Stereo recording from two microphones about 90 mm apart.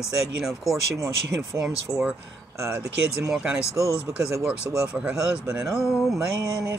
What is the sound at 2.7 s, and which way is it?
Speech, 35° right (ahead or behind).